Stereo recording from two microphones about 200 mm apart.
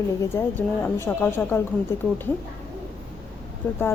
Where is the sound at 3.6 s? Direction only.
10° left (ahead or behind).